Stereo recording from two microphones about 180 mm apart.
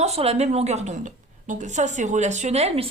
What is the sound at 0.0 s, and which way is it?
Speech, 35° right (ahead or behind).